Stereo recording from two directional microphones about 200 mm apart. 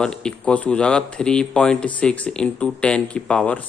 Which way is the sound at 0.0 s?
5° left (ahead or behind).